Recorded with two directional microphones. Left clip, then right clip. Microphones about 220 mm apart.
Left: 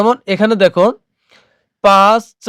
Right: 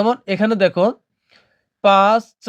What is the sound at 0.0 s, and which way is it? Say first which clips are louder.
Speech: left 5 dB; 25° left (ahead or behind).